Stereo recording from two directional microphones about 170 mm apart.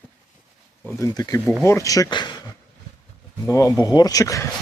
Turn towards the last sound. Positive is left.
turn(degrees=20)  # may be behind; listen again after turning